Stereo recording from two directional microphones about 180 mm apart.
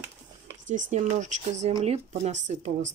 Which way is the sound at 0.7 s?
45° right (ahead or behind).